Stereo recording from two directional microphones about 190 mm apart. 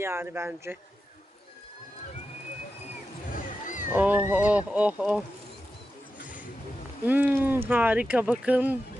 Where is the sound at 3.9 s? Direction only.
10° right (ahead or behind).